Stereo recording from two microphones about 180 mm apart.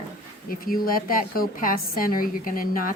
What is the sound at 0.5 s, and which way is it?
A woman's voice, 55° left (ahead or behind).